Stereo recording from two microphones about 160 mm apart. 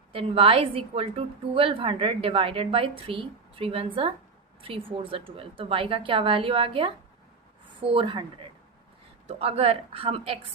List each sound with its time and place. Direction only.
0.1 s a woman's voice: 35° right (ahead or behind)
9.2 s a woman's voice: 40° right (ahead or behind)